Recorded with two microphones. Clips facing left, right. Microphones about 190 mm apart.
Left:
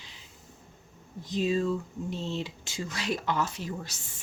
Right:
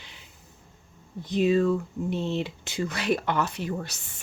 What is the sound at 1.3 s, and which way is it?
Speech, 60° right (ahead or behind).